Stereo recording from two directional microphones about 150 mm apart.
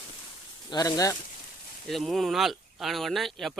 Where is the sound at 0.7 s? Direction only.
25° left (ahead or behind).